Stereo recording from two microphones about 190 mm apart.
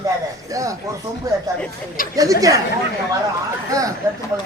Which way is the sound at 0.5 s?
15° right (ahead or behind).